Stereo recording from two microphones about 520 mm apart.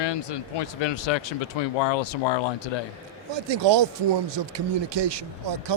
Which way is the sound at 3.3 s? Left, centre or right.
Right.